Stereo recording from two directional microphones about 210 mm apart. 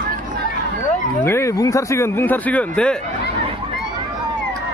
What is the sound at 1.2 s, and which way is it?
Speech, 10° left (ahead or behind).